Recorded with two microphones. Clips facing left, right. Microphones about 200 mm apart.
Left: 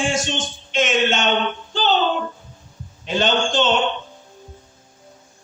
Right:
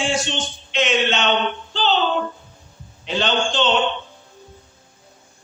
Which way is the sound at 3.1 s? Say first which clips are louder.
Left 2 dB; 45° left (ahead or behind).